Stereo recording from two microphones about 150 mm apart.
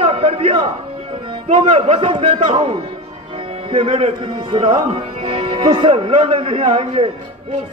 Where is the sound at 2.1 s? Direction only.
35° right (ahead or behind).